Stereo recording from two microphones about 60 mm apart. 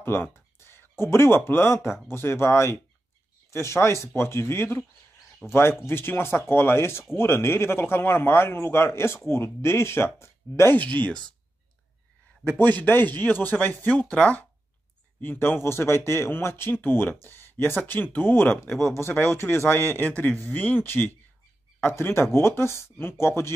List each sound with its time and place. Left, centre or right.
0.0 s a man's voice: left
10.8 s speech: left
12.4 s speech: left
15.2 s a man's voice: left
20.0 s a man's voice: left